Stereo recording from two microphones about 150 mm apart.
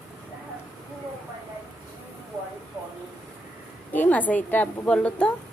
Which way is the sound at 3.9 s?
10° left (ahead or behind).